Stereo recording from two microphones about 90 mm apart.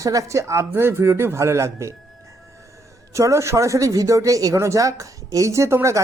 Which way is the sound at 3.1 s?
35° right (ahead or behind).